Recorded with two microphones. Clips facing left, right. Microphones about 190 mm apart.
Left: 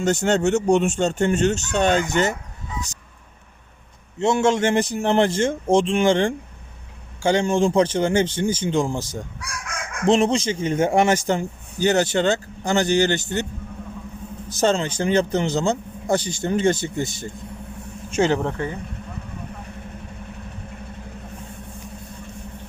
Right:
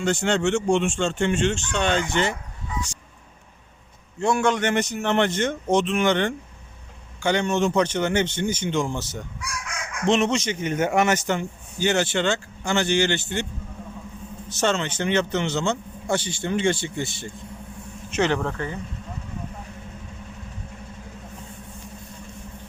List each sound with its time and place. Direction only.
0.0 s a man's voice: 40° left (ahead or behind)
4.2 s a man's voice: 25° left (ahead or behind)
10.1 s a man's voice: 35° left (ahead or behind)
14.6 s a man's voice: 35° left (ahead or behind)
18.2 s a man's voice: 20° left (ahead or behind)